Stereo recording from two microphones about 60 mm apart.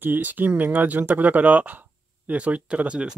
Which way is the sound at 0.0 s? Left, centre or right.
Right.